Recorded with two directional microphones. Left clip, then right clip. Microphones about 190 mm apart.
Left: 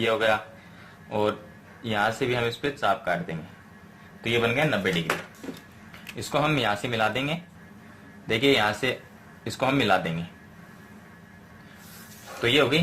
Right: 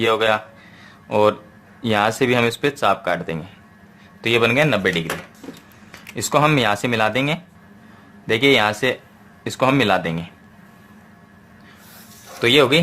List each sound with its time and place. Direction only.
0.0 s speech: 35° right (ahead or behind)
1.8 s speech: 40° right (ahead or behind)
12.4 s speech: 35° right (ahead or behind)